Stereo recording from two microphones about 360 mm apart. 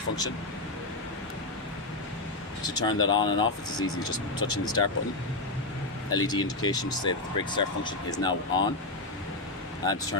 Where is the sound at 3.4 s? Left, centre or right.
Left.